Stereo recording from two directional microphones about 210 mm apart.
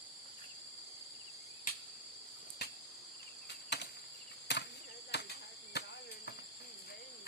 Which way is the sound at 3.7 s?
55° left (ahead or behind).